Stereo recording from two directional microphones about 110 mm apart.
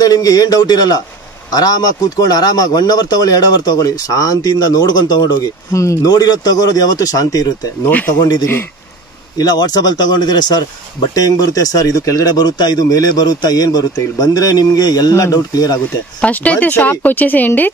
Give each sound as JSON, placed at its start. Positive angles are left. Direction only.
{"t": 0.0, "sound": "speech", "side_deg": 35}
{"t": 7.8, "sound": "speech", "side_deg": 15}
{"t": 8.2, "sound": "speech", "side_deg": 35}
{"t": 16.2, "sound": "speech", "side_deg": 15}